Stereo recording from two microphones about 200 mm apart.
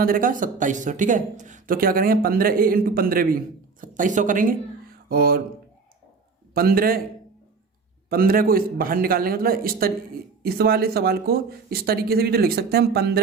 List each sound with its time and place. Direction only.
0.0 s speech: 45° right (ahead or behind)
6.5 s speech: 50° right (ahead or behind)
8.1 s speech: 45° right (ahead or behind)